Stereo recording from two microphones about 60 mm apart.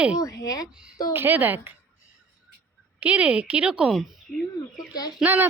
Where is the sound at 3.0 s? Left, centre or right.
Right.